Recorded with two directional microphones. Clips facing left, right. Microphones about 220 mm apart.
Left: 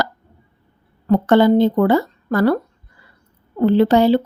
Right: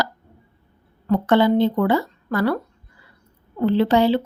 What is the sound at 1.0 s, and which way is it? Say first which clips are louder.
A woman's voice: left 4 dB; 40° left (ahead or behind).